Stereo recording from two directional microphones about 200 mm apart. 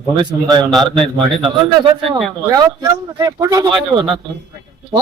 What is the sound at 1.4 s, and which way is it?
A man's voice, 25° right (ahead or behind).